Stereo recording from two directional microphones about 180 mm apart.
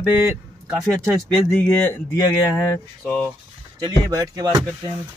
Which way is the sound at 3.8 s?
20° right (ahead or behind).